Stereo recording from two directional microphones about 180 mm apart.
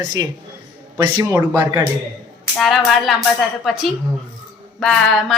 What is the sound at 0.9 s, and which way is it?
Speech, 20° right (ahead or behind).